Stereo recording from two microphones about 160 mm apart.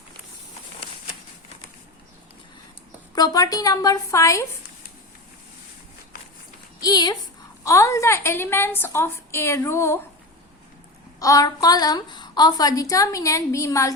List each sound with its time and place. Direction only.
3.2 s a woman's voice: 25° left (ahead or behind)
6.8 s a woman's voice: 25° left (ahead or behind)
11.2 s a woman's voice: 20° left (ahead or behind)